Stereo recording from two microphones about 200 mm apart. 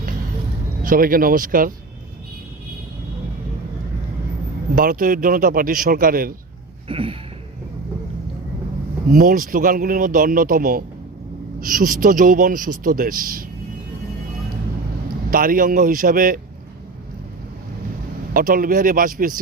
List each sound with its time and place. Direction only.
0.8 s a man's voice: 45° right (ahead or behind)
4.7 s a man's voice: 45° right (ahead or behind)
6.8 s a sound: 25° right (ahead or behind)
9.1 s a man's voice: 45° right (ahead or behind)
15.3 s a man's voice: 45° right (ahead or behind)
18.3 s a man's voice: 45° right (ahead or behind)